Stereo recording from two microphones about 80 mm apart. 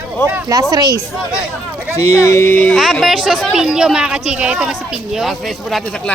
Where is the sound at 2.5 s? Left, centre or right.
Left.